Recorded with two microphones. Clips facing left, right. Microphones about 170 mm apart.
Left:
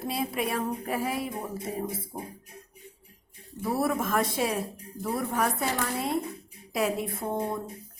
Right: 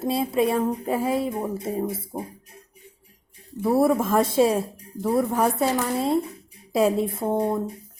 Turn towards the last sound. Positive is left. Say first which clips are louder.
# right 7 dB
turn(degrees=-30)  # may be behind; listen again after turning